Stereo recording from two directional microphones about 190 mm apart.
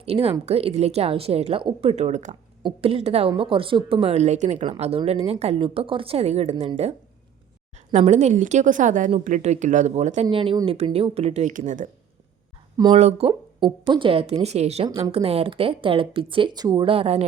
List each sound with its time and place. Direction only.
0.0 s a woman's voice: 30° right (ahead or behind)
7.9 s a woman's voice: 40° right (ahead or behind)
10.2 s a woman's voice: 25° right (ahead or behind); by 11.9 s 40° right (ahead or behind)
12.7 s speech: 20° right (ahead or behind)
13.0 s a woman's voice: 35° right (ahead or behind)